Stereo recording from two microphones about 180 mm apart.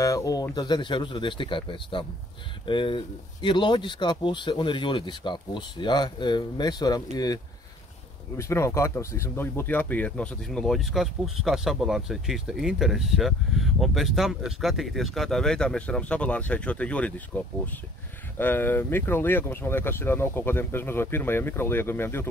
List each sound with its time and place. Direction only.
0.0 s speech: 20° left (ahead or behind)
8.4 s speech: 15° left (ahead or behind)